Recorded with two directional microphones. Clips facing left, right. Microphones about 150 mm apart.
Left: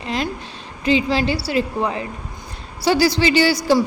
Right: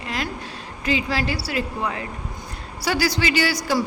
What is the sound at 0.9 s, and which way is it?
A woman's voice, 25° left (ahead or behind).